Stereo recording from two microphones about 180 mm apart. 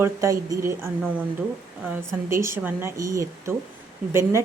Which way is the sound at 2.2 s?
15° right (ahead or behind).